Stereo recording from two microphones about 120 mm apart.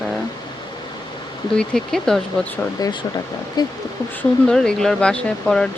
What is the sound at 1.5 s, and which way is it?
Speech, 5° left (ahead or behind).